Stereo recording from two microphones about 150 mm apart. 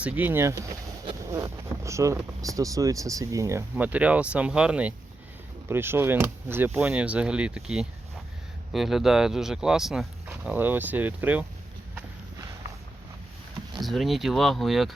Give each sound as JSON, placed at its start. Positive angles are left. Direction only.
{"t": 0.0, "sound": "speech", "side_deg": -10}
{"t": 13.8, "sound": "speech", "side_deg": 0}